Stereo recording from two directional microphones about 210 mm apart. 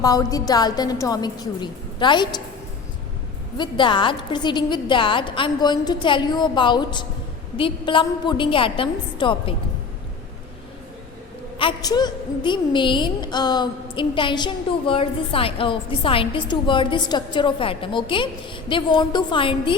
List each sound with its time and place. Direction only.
0.0 s a woman's voice: 15° left (ahead or behind)
3.6 s a woman's voice: 25° left (ahead or behind)
11.5 s a woman's voice: 20° left (ahead or behind)